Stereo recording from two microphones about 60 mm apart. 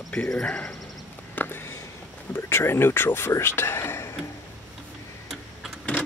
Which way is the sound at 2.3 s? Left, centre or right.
Left.